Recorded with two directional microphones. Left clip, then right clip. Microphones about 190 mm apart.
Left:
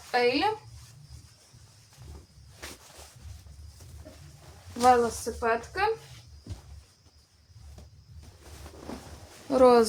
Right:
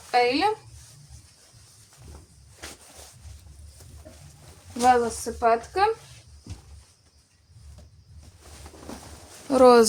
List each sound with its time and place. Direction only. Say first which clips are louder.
0.1 s speech: right 3 dB; 60° right (ahead or behind)
4.8 s speech: right 2 dB; 50° right (ahead or behind)
9.5 s speech: right 4 dB; 35° right (ahead or behind)